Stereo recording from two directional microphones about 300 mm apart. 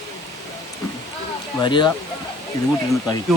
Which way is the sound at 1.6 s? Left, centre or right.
Centre.